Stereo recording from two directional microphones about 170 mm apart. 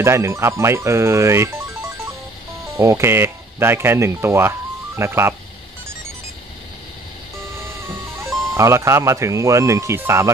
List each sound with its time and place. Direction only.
0.0 s speech: 15° right (ahead or behind)
2.8 s speech: 15° right (ahead or behind)
8.5 s speech: 15° right (ahead or behind)